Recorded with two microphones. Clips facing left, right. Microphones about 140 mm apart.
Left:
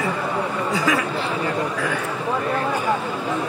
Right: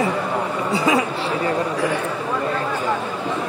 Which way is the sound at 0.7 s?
25° right (ahead or behind).